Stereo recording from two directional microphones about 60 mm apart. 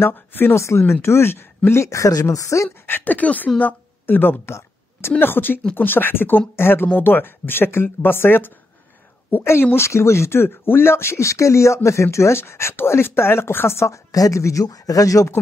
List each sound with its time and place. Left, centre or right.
0.0 s speech: left
0.6 s speech: left
2.9 s a woman's voice: left
13.8 s speech: left